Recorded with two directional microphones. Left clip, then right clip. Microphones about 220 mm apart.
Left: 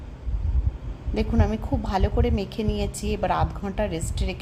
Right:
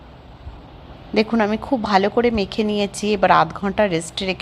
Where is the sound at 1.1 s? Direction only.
20° right (ahead or behind).